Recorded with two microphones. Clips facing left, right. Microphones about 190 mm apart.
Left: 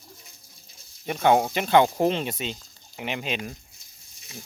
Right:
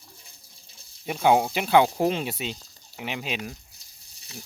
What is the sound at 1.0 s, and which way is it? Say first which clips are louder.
Speech: even; 5° right (ahead or behind).